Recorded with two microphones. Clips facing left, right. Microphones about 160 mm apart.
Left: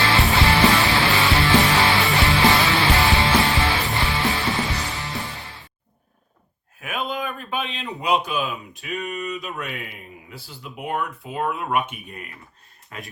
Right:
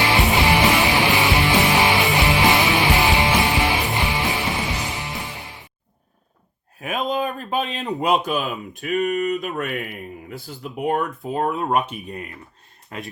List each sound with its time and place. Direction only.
0.0 s music: 15° right (ahead or behind)
6.7 s speech: 35° right (ahead or behind)